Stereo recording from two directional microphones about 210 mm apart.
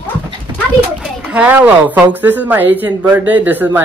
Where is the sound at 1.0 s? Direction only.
5° right (ahead or behind).